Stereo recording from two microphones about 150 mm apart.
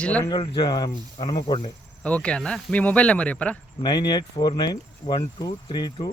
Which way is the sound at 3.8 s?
30° left (ahead or behind).